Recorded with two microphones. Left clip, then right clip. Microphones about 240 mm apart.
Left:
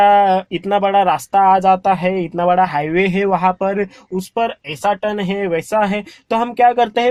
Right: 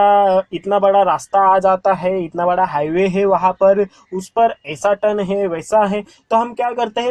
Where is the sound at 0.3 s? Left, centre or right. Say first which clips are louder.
Right 1 dB; left.